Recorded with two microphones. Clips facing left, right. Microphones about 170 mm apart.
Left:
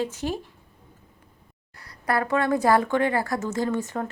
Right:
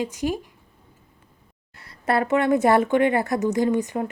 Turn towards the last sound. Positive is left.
turn(degrees=-15)  # may be behind; listen again after turning